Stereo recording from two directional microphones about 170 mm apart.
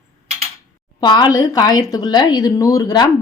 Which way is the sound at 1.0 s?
25° left (ahead or behind).